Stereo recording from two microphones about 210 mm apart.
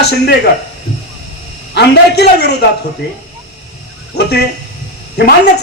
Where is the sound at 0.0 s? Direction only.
50° left (ahead or behind).